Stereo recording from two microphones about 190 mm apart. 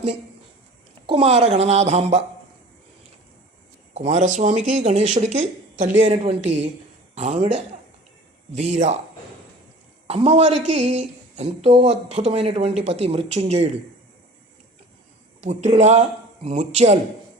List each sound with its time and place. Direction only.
1.0 s a woman's voice: 30° right (ahead or behind)
3.9 s a woman's voice: 35° right (ahead or behind)
10.1 s a woman's voice: 30° right (ahead or behind)
15.4 s a woman's voice: 35° right (ahead or behind)